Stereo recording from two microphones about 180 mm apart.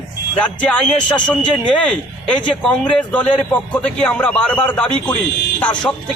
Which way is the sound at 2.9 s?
5° left (ahead or behind).